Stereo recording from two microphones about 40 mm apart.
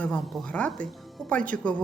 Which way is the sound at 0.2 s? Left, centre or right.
Centre.